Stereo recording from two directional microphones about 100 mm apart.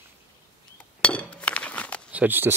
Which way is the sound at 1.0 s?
10° left (ahead or behind).